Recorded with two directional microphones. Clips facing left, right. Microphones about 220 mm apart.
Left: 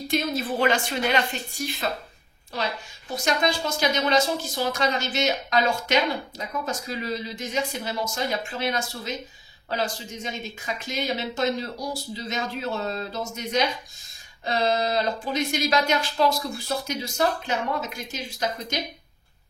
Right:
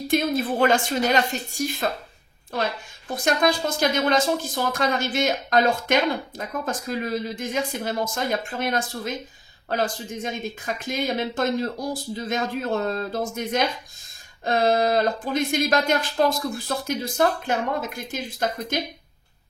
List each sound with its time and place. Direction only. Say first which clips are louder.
0.1 s a woman's voice: right 4 dB; 55° right (ahead or behind)